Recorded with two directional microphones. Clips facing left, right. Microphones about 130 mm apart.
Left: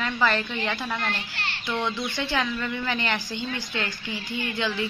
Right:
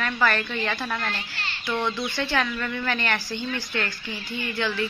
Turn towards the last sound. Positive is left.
turn(degrees=20)  # may be behind; listen again after turning